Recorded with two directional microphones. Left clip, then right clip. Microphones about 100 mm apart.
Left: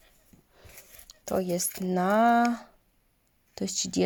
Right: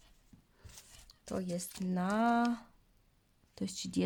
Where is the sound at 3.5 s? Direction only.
20° left (ahead or behind).